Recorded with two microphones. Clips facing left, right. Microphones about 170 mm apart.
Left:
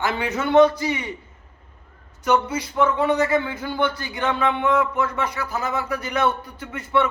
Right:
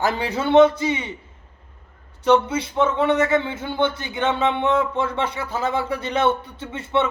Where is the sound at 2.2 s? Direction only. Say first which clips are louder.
Right 3 dB; 25° right (ahead or behind).